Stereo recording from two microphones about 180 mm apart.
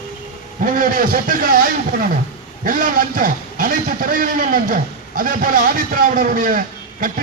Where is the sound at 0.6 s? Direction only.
50° right (ahead or behind).